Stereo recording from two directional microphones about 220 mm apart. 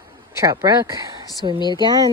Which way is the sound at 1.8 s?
20° right (ahead or behind).